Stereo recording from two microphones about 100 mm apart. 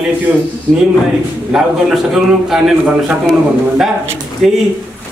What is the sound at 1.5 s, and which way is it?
Speech, 5° right (ahead or behind).